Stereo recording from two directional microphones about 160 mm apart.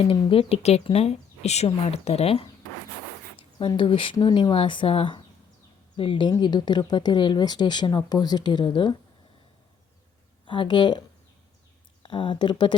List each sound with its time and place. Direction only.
0.0 s a woman's voice: 35° left (ahead or behind)
10.4 s speech: 30° left (ahead or behind)
12.0 s speech: 30° left (ahead or behind)